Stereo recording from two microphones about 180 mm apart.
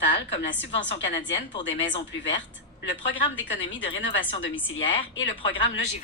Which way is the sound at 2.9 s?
90° left.